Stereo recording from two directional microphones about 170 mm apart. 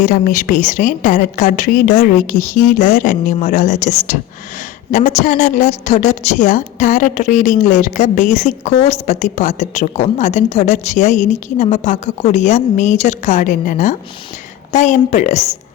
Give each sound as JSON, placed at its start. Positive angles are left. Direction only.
{"t": 0.0, "sound": "a woman's voice", "side_deg": 50}